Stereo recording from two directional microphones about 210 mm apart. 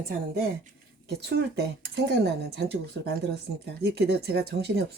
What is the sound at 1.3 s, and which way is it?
Speech, 55° right (ahead or behind).